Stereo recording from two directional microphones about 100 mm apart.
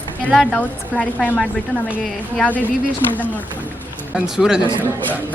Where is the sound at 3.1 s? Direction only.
15° left (ahead or behind).